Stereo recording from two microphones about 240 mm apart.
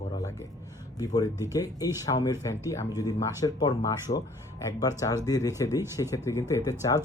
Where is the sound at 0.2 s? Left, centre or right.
Centre.